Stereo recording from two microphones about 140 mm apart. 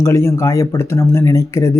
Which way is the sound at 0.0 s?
20° left (ahead or behind).